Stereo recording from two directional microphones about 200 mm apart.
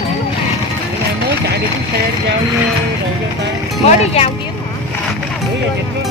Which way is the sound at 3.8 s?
30° left (ahead or behind).